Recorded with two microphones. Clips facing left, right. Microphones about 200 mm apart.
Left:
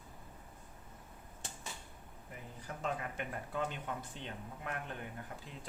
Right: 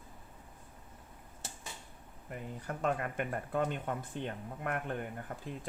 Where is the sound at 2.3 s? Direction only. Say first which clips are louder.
Right 7 dB; 60° right (ahead or behind).